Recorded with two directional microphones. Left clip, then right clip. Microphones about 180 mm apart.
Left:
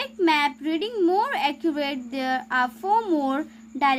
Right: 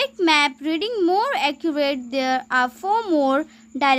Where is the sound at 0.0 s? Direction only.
35° right (ahead or behind).